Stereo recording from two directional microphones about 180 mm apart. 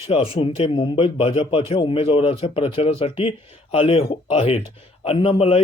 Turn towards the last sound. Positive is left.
turn(degrees=35)  # may be behind; listen again after turning